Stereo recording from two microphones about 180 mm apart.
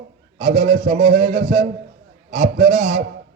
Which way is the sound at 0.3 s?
45° right (ahead or behind).